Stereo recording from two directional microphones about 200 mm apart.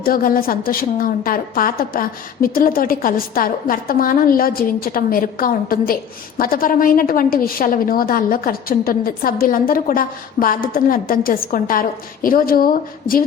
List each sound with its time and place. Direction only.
0.0 s a woman's voice: 45° left (ahead or behind)